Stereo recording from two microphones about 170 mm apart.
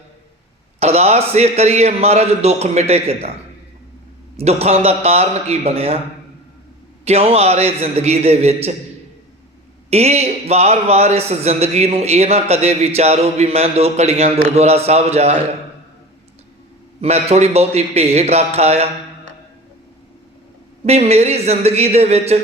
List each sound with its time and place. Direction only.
0.8 s a man's voice: 40° right (ahead or behind)
4.4 s a man's voice: 35° right (ahead or behind)
7.0 s a man's voice: 35° right (ahead or behind)
9.9 s a man's voice: 40° right (ahead or behind)
17.0 s a man's voice: 40° right (ahead or behind)
20.8 s a man's voice: 40° right (ahead or behind)